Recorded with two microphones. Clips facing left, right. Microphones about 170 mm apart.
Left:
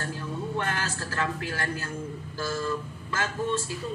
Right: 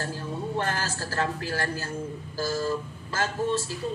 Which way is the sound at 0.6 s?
35° right (ahead or behind).